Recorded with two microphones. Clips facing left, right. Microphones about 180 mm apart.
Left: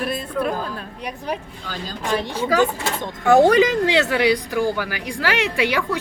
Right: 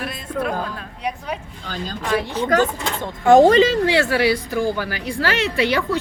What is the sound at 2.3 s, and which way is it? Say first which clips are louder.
Speech: even; 10° left (ahead or behind).